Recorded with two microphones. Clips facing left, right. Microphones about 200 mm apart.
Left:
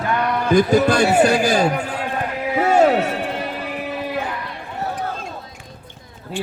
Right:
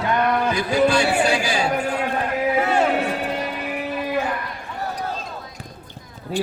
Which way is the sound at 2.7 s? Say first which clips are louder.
Left 5 dB; 40° left (ahead or behind).